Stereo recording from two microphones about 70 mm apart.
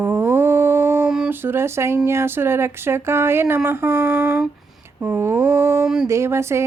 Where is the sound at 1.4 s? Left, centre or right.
Right.